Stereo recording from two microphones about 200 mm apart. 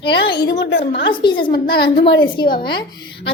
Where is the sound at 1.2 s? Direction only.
25° left (ahead or behind).